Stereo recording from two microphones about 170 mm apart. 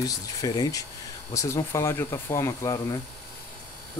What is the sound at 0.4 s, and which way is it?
Speech, 20° left (ahead or behind).